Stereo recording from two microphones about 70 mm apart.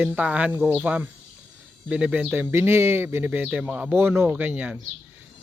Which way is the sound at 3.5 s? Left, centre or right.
Centre.